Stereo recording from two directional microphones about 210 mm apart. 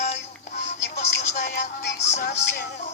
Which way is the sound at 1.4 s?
55° left (ahead or behind).